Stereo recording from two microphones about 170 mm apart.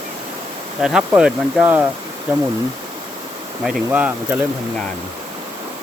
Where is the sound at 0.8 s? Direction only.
5° right (ahead or behind).